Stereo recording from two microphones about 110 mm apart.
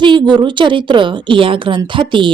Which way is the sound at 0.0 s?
45° right (ahead or behind).